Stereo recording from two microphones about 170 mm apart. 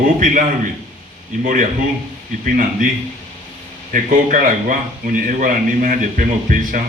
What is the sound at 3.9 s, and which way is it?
A man's voice, 50° right (ahead or behind).